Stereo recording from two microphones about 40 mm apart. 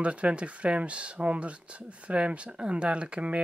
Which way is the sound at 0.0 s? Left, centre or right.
Right.